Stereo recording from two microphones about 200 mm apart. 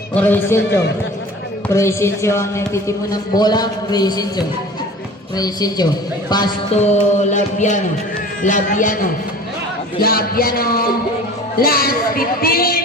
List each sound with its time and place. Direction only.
0.1 s speech: 10° left (ahead or behind)
1.6 s a woman's voice: 15° left (ahead or behind)
6.7 s music: 35° left (ahead or behind)
10.0 s speech: 50° left (ahead or behind)